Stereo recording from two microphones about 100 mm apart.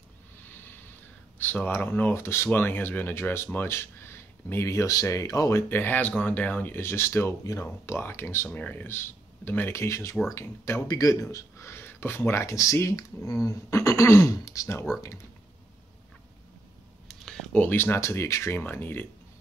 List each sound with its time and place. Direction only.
1.4 s speech: 20° left (ahead or behind)
10.9 s a man's voice: 35° left (ahead or behind)
17.1 s speech: 5° left (ahead or behind); by 19.0 s 20° left (ahead or behind)